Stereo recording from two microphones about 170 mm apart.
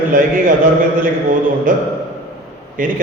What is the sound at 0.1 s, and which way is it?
Speech, 55° right (ahead or behind).